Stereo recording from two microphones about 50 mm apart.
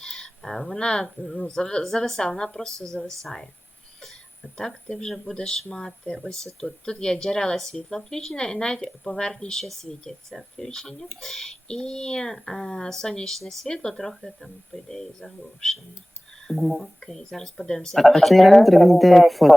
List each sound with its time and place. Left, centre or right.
0.0 s a sound: centre
0.8 s speech: centre
4.5 s speech: centre
13.7 s speech: centre